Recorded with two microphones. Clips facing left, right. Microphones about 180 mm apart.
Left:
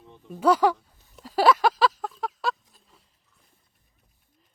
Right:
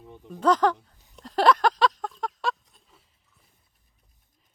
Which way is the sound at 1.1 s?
5° left (ahead or behind).